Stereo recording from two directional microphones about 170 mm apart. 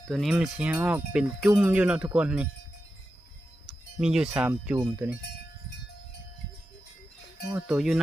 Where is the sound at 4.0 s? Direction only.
5° right (ahead or behind).